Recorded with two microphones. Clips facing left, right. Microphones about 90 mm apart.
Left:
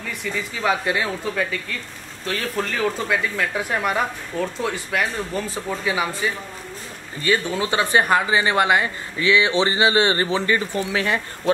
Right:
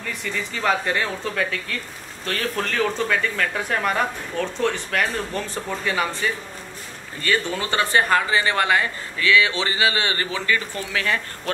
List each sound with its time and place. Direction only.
0.0 s speech: 5° left (ahead or behind); by 11.5 s 20° left (ahead or behind)